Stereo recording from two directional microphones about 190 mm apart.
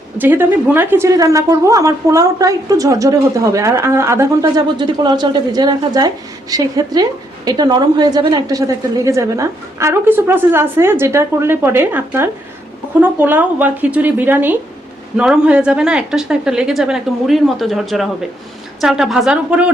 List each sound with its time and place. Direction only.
0.2 s a woman's voice: 10° right (ahead or behind)